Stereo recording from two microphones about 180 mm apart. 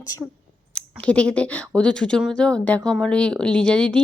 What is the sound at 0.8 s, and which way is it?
Speech, 5° left (ahead or behind).